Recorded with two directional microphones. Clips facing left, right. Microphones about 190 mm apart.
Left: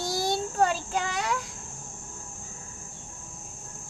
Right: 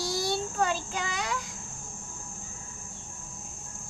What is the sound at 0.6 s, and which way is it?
Child singing, 40° left (ahead or behind).